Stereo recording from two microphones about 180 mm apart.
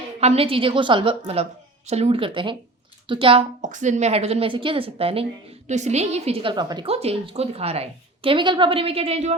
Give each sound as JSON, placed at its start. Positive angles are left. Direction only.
{"t": 0.2, "sound": "a woman's voice", "side_deg": -35}
{"t": 3.6, "sound": "a woman's voice", "side_deg": -45}